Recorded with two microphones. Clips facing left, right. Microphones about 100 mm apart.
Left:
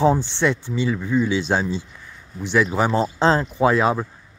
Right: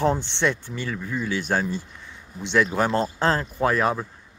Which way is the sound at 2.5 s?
10° left (ahead or behind).